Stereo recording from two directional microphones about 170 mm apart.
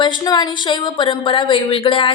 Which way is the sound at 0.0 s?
25° left (ahead or behind).